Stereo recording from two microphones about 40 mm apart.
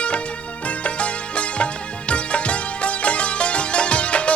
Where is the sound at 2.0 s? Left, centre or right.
Left.